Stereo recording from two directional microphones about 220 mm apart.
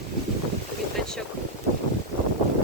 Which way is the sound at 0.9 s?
5° left (ahead or behind).